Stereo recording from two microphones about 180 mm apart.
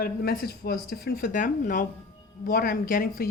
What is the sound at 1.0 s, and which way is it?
Speech, 50° left (ahead or behind).